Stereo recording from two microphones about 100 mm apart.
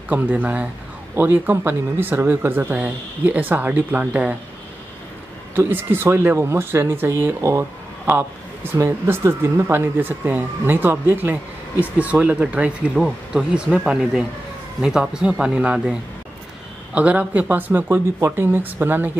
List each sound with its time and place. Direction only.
0.1 s speech: 15° right (ahead or behind)
5.5 s a man's voice: 20° right (ahead or behind)